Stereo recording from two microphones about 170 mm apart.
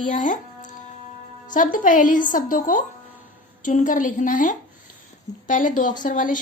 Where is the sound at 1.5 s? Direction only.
50° left (ahead or behind).